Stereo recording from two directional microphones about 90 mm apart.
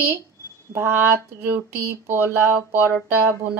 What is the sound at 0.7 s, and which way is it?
Speech, 25° right (ahead or behind).